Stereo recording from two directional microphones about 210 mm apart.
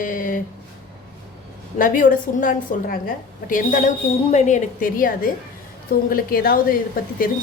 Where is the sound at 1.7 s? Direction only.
40° left (ahead or behind).